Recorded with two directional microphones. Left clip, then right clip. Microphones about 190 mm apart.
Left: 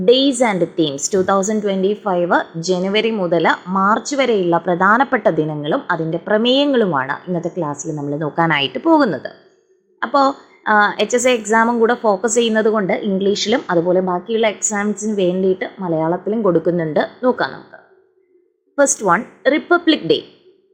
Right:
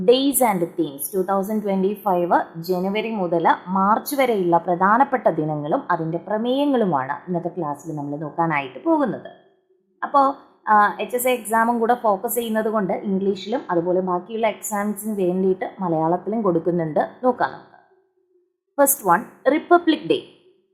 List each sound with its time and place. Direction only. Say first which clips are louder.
0.0 s a woman's voice: left 4 dB; 5° left (ahead or behind)
1.5 s a woman's voice: left 5 dB; centre (ahead or behind)
4.6 s a woman's voice: left 3 dB; 15° left (ahead or behind)
6.7 s a woman's voice: left 4 dB; 5° left (ahead or behind)
18.9 s a woman's voice: left 3 dB; 15° left (ahead or behind)